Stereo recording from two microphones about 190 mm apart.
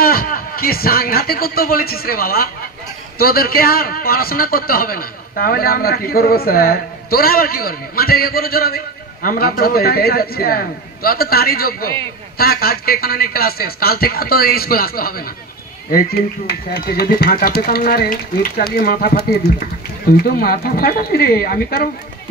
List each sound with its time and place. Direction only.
0.0 s a man's voice: 50° left (ahead or behind)
20.2 s a man's voice: 50° left (ahead or behind)